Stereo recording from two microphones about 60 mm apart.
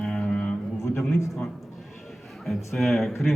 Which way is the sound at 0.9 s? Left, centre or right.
Left.